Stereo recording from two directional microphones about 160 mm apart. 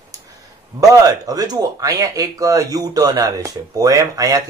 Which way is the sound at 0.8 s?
20° right (ahead or behind).